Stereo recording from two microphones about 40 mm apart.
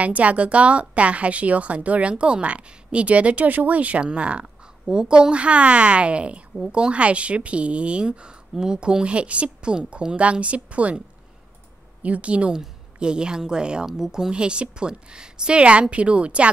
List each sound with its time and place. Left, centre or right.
0.0 s a woman's voice: right
12.0 s a woman's voice: right; by 14.3 s centre
14.3 s a woman's voice: right